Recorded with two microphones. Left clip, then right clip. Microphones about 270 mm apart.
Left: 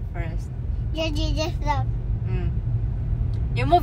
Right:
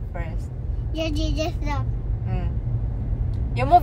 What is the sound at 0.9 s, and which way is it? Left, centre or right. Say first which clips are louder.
Speech: even; centre.